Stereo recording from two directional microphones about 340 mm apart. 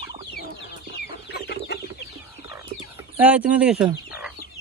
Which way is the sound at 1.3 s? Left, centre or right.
Left.